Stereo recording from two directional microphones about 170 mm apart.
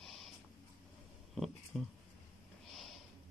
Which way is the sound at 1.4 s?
Centre (ahead or behind).